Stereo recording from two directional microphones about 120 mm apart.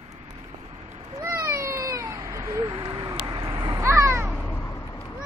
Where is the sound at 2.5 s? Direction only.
40° right (ahead or behind).